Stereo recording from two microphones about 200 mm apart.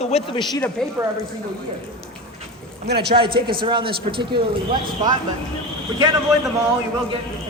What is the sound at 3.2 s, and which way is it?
A man's voice, 25° right (ahead or behind).